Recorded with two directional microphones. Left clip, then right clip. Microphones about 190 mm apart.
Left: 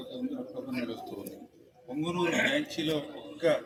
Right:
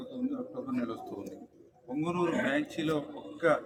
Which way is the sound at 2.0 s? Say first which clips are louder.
Left 2 dB; 35° right (ahead or behind).